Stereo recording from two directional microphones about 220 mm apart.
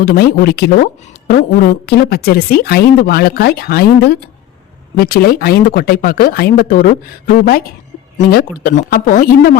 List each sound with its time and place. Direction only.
0.0 s a woman's voice: 45° left (ahead or behind)
8.3 s speech: 45° left (ahead or behind)